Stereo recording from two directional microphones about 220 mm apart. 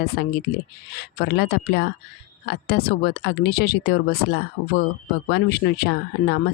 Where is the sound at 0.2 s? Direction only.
50° left (ahead or behind).